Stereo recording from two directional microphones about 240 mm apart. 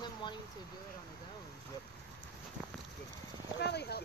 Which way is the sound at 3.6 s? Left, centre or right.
Left.